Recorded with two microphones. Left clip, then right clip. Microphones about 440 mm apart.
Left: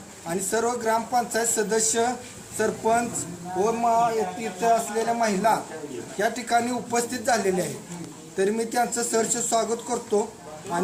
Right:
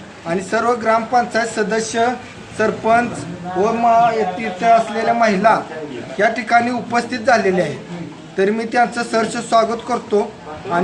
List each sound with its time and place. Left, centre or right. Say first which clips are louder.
0.3 s speech: right 8 dB; left